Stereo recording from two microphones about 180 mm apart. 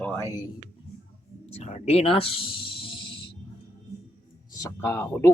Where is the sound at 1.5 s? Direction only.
40° left (ahead or behind).